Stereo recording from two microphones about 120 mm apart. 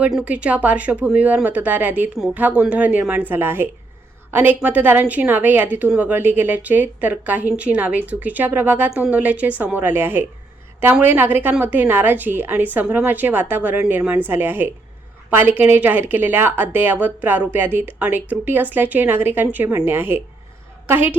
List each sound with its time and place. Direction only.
0.1 s a woman's voice: 10° right (ahead or behind)